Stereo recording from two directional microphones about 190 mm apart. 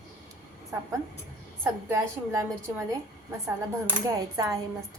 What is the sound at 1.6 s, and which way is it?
Speech, 15° right (ahead or behind).